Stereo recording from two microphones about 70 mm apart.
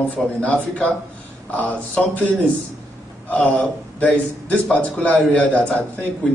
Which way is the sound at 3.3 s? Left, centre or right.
Centre.